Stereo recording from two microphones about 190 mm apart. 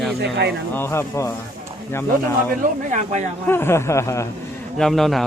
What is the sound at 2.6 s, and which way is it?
Speech, 40° right (ahead or behind).